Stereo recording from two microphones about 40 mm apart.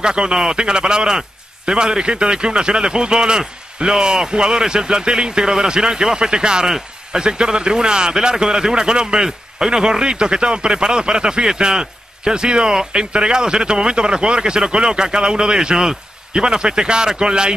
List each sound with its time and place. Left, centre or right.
0.0 s a man's voice: right